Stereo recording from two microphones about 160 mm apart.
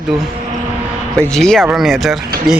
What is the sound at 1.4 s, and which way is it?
Speech, 5° left (ahead or behind).